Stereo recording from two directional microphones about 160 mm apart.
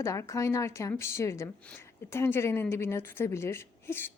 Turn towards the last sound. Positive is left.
turn(degrees=15)  # may be behind; listen again after turning